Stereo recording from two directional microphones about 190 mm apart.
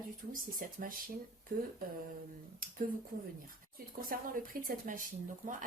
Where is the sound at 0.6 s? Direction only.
45° right (ahead or behind).